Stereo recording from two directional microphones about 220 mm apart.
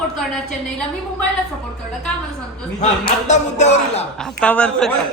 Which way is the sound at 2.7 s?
30° left (ahead or behind).